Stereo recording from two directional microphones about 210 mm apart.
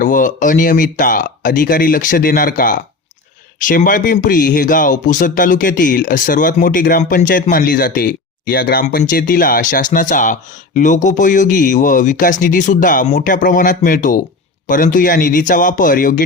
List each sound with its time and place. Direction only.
0.0 s speech: 40° left (ahead or behind)